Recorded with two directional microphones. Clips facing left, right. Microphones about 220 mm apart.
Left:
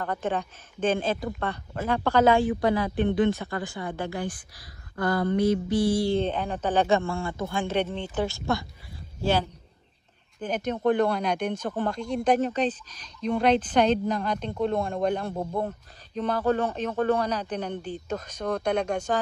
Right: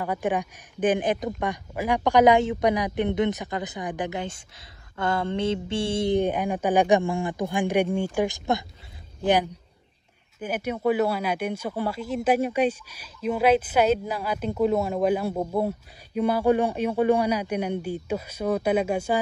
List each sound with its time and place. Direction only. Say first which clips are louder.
0.0 s speech: right 3 dB; 10° right (ahead or behind)